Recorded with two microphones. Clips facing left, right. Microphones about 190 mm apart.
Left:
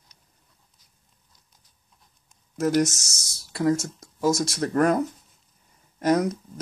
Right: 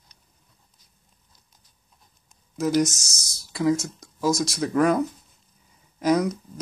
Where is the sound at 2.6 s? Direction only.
5° left (ahead or behind).